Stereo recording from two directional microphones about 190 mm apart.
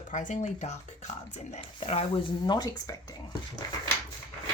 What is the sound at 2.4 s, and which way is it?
Speech, 20° left (ahead or behind).